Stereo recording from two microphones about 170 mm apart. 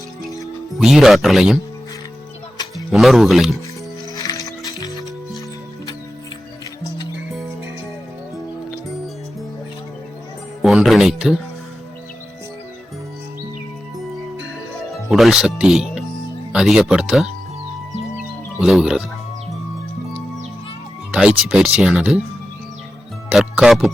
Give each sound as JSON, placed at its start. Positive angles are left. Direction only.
{"t": 0.8, "sound": "speech", "side_deg": 0}
{"t": 2.9, "sound": "speech", "side_deg": 0}
{"t": 4.1, "sound": "music", "side_deg": 20}
{"t": 10.6, "sound": "music", "side_deg": 0}
{"t": 15.1, "sound": "speech", "side_deg": 0}
{"t": 18.6, "sound": "speech", "side_deg": -5}
{"t": 21.1, "sound": "speech", "side_deg": -5}
{"t": 23.3, "sound": "speech", "side_deg": 0}